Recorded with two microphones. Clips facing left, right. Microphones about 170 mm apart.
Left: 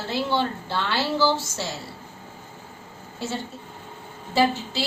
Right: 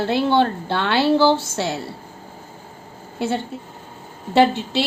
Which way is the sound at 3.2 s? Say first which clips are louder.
Right 7 dB; 60° right (ahead or behind).